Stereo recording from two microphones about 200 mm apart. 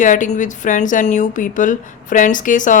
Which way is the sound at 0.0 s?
40° left (ahead or behind).